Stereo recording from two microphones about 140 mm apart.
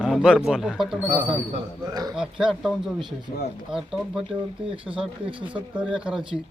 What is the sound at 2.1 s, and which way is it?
Speech, 5° right (ahead or behind).